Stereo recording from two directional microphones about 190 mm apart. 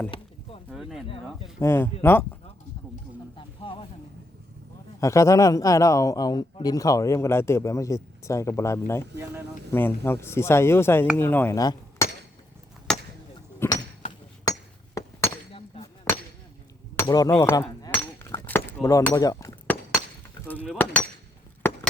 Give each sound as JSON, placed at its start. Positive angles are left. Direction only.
{"t": 0.7, "sound": "speech", "side_deg": 0}
{"t": 1.5, "sound": "a man's voice", "side_deg": 10}
{"t": 3.3, "sound": "a sound", "side_deg": 25}
{"t": 4.9, "sound": "a man's voice", "side_deg": 15}
{"t": 13.6, "sound": "a sound", "side_deg": 15}
{"t": 15.0, "sound": "chink", "side_deg": 15}
{"t": 15.5, "sound": "a sound", "side_deg": 30}
{"t": 17.0, "sound": "chink", "side_deg": 20}
{"t": 20.7, "sound": "speech", "side_deg": 5}